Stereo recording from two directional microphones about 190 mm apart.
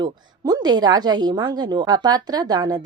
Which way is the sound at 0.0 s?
20° right (ahead or behind).